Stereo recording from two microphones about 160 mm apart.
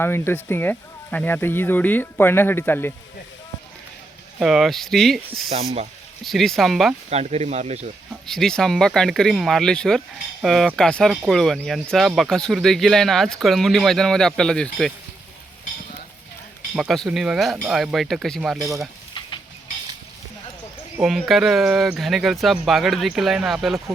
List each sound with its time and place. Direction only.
0.0 s speech: 15° left (ahead or behind)
4.4 s speech: centre (ahead or behind)
5.5 s speech: 40° right (ahead or behind)
6.2 s speech: centre (ahead or behind)
7.1 s speech: 40° right (ahead or behind)
8.3 s speech: 5° left (ahead or behind)
16.7 s speech: centre (ahead or behind)
21.0 s speech: centre (ahead or behind)